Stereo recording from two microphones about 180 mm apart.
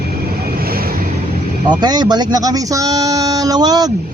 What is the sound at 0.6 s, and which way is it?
Vehicle, 55° right (ahead or behind).